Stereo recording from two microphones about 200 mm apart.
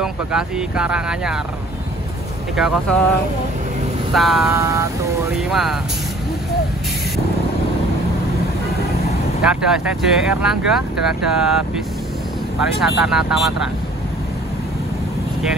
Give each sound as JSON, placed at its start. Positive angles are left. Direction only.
{"t": 0.0, "sound": "speech", "side_deg": -5}
{"t": 2.5, "sound": "speech", "side_deg": 0}
{"t": 4.1, "sound": "speech", "side_deg": 0}
{"t": 4.5, "sound": "vehicle", "side_deg": -15}
{"t": 5.4, "sound": "speech", "side_deg": 0}
{"t": 9.4, "sound": "speech", "side_deg": -5}
{"t": 13.0, "sound": "speech", "side_deg": 0}